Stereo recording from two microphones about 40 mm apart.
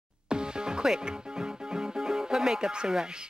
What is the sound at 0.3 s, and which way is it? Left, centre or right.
Speech, right.